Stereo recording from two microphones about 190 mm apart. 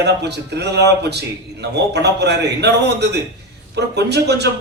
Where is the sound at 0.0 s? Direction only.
60° right (ahead or behind).